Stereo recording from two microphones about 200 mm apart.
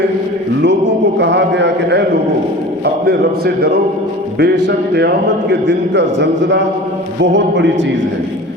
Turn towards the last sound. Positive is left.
turn(degrees=-65)  # may be behind; listen again after turning